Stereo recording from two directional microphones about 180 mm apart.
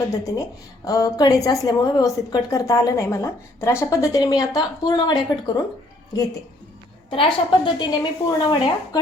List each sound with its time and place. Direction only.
0.9 s a woman's voice: 20° left (ahead or behind)
7.1 s a woman's voice: 30° left (ahead or behind)